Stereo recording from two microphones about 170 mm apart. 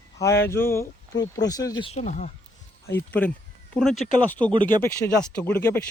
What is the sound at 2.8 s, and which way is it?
Speech, 10° left (ahead or behind).